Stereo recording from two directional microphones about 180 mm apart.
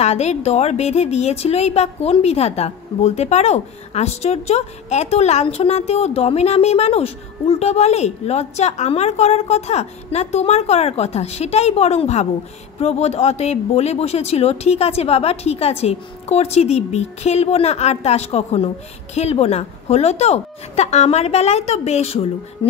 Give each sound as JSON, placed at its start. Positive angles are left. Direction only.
{"t": 0.0, "sound": "a woman's voice", "side_deg": 35}